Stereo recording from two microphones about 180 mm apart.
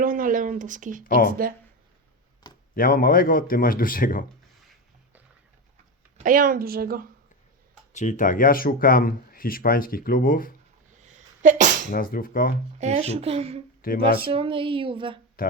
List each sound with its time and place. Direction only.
0.0 s a sound: 50° right (ahead or behind)
1.0 s speech: 50° left (ahead or behind)
1.3 s a woman's voice: 50° right (ahead or behind)
2.7 s speech: 50° left (ahead or behind)
6.1 s a woman's voice: 45° right (ahead or behind)
7.9 s speech: 45° left (ahead or behind)
10.9 s sneeze: 40° right (ahead or behind)
11.9 s speech: 50° left (ahead or behind)
12.8 s a child's voice: 35° right (ahead or behind)
13.8 s speech: 50° left (ahead or behind)
14.3 s speech: 30° right (ahead or behind)